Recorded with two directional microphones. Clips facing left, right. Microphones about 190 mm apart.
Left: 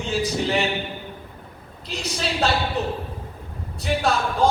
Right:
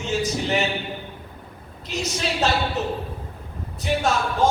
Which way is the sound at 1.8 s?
35° left (ahead or behind).